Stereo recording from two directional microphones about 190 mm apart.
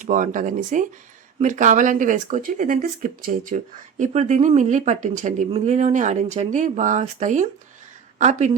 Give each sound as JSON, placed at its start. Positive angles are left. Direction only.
{"t": 0.0, "sound": "speech", "side_deg": -40}